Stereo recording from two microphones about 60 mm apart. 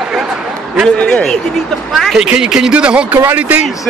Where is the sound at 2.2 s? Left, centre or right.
Centre.